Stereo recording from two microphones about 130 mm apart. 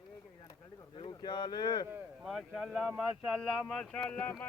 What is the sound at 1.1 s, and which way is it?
Speech, 35° left (ahead or behind).